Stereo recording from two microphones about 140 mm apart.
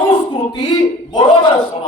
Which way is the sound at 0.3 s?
25° left (ahead or behind).